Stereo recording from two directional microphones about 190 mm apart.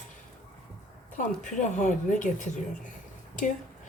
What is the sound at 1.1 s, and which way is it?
Speech, 40° left (ahead or behind).